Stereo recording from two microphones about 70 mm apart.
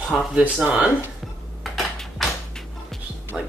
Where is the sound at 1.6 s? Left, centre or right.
Centre.